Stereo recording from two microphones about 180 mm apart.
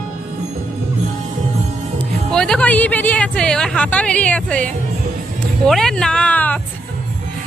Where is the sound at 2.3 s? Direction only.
5° left (ahead or behind).